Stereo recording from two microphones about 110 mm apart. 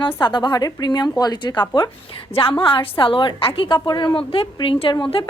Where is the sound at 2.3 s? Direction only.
55° left (ahead or behind).